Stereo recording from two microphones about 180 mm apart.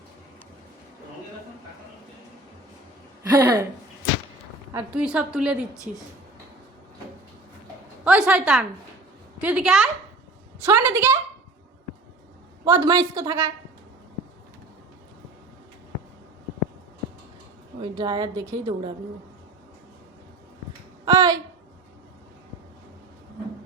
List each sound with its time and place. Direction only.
3.2 s a woman's voice: 15° right (ahead or behind)
4.7 s a woman's voice: 5° right (ahead or behind)
8.0 s a woman's voice: 5° right (ahead or behind)
10.7 s a woman's voice: 15° right (ahead or behind)
12.6 s a woman's voice: 20° right (ahead or behind)
17.9 s a woman's voice: 25° right (ahead or behind)
21.0 s a sound: 20° right (ahead or behind)